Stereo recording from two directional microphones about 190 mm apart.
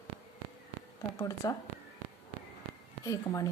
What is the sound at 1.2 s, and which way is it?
Speech, 20° left (ahead or behind).